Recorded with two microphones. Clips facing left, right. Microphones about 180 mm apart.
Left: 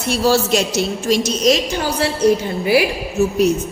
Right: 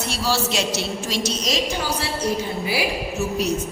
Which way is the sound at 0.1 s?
50° left (ahead or behind).